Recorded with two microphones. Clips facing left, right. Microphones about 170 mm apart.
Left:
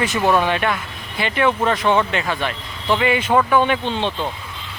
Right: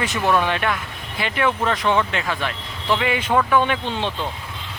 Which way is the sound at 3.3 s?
15° left (ahead or behind).